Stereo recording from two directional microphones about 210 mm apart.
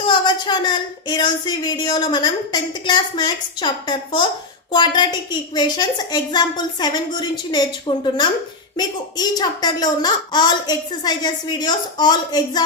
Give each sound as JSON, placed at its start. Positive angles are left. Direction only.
{"t": 0.0, "sound": "speech", "side_deg": 20}